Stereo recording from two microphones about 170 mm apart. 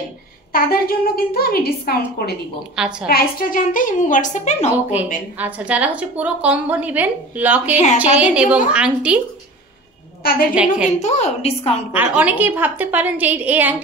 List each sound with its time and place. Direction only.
0.5 s a woman's voice: 60° left (ahead or behind)
2.7 s a woman's voice: 5° right (ahead or behind)
3.1 s a woman's voice: 60° left (ahead or behind); by 4.6 s 45° left (ahead or behind)
5.4 s a woman's voice: 10° right (ahead or behind)
7.7 s a woman's voice: 45° left (ahead or behind)
8.0 s a woman's voice: 10° right (ahead or behind)
10.2 s a woman's voice: 60° left (ahead or behind)
10.5 s a woman's voice: 5° right (ahead or behind)
11.0 s a woman's voice: 40° left (ahead or behind)
11.9 s a woman's voice: 10° right (ahead or behind)